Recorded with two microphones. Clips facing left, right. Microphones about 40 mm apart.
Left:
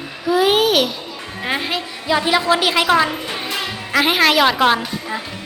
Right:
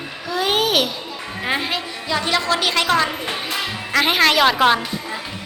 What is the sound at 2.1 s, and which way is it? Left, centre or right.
A woman's voice, centre.